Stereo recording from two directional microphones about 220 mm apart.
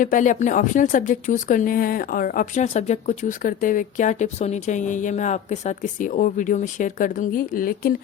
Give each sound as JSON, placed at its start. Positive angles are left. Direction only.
{"t": 0.0, "sound": "speech", "side_deg": 35}